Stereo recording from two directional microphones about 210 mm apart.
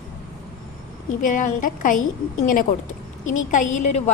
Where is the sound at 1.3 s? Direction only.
40° left (ahead or behind).